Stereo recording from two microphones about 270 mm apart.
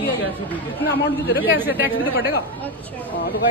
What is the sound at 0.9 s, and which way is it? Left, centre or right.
Speech, left.